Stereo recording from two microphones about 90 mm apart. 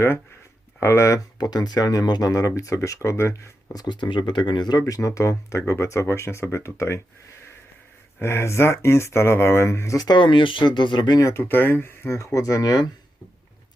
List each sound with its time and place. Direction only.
0.8 s speech: 30° left (ahead or behind)
1.4 s speech: 50° left (ahead or behind); by 3.4 s 30° left (ahead or behind)
3.7 s speech: 50° left (ahead or behind)
4.8 s speech: 35° left (ahead or behind)
8.2 s speech: 30° left (ahead or behind); by 11.2 s 55° left (ahead or behind)
11.2 s speech: 30° left (ahead or behind); by 12.9 s 45° left (ahead or behind)